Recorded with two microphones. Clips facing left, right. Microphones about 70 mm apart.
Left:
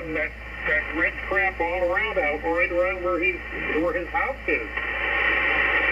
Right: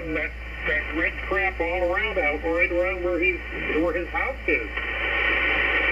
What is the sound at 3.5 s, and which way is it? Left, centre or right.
Speech, centre.